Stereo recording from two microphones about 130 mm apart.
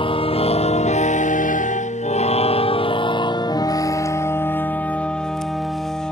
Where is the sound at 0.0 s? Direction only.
45° left (ahead or behind).